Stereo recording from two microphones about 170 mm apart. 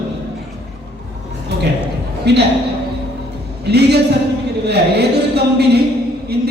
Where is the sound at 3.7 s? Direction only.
75° right (ahead or behind).